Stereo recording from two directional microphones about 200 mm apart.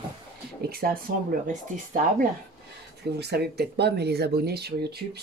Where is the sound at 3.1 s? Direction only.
55° right (ahead or behind).